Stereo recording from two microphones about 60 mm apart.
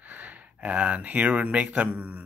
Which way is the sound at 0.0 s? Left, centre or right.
Right.